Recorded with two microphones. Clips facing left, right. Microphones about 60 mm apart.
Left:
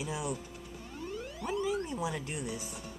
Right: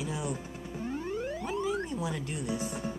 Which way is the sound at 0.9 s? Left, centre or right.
Right.